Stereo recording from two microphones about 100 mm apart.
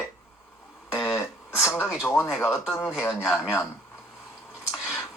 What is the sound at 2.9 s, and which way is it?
Speech, centre (ahead or behind).